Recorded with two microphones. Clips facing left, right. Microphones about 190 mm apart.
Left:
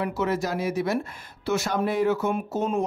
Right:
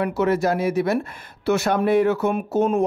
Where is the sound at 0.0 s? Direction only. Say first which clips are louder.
Right 6 dB; 60° right (ahead or behind).